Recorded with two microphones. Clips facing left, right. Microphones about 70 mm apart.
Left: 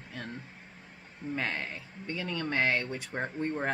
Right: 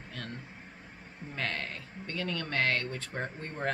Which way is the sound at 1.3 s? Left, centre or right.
Centre.